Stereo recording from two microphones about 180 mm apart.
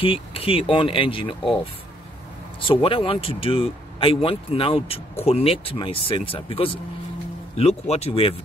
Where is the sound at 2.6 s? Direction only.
30° left (ahead or behind).